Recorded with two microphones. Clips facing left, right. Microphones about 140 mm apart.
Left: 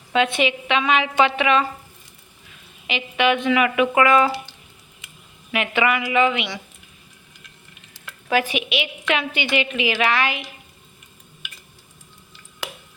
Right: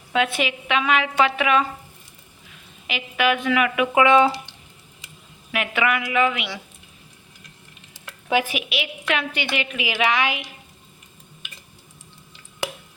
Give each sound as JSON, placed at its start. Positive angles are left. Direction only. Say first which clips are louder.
{"t": 0.1, "sound": "a woman's voice", "louder": "left 3 dB", "side_deg": -5}
{"t": 2.8, "sound": "a woman's voice", "louder": "left 2 dB", "side_deg": -5}
{"t": 4.0, "sound": "speech", "louder": "right 2 dB", "side_deg": -25}
{"t": 5.5, "sound": "a woman's voice", "louder": "left 2 dB", "side_deg": 0}
{"t": 8.0, "sound": "a sound", "louder": "left 1 dB", "side_deg": -15}
{"t": 8.5, "sound": "a woman's voice", "louder": "left 3 dB", "side_deg": 0}